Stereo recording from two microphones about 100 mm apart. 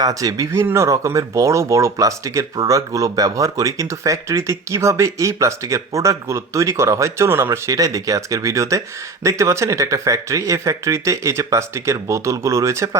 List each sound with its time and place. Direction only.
0.0 s speech: 35° right (ahead or behind)